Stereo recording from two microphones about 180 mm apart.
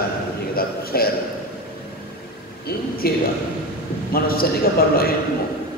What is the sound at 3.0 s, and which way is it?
A man's voice, 60° left (ahead or behind).